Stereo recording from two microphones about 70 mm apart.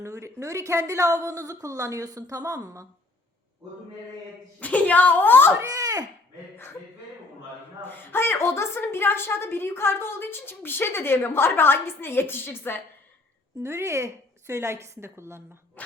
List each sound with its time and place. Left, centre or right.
0.0 s a woman's voice: right
4.6 s a woman's voice: left
5.6 s speech: right
7.9 s a woman's voice: left
13.6 s a woman's voice: right